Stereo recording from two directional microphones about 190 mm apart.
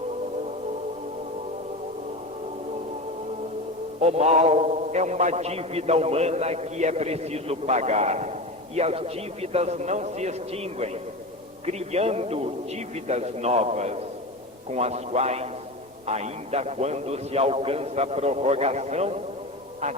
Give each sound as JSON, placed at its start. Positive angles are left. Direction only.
{"t": 4.0, "sound": "a man's voice", "side_deg": -35}